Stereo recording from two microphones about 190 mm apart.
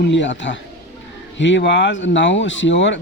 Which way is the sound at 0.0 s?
70° left (ahead or behind).